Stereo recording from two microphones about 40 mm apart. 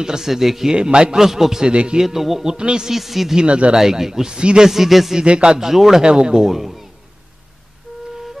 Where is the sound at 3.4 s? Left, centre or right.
Right.